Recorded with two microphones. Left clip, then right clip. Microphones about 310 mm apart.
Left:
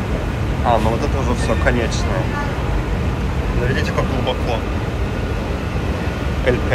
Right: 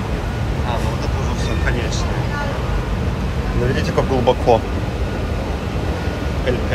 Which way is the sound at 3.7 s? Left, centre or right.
Right.